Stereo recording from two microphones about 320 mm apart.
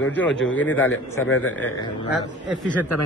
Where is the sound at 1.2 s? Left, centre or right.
Left.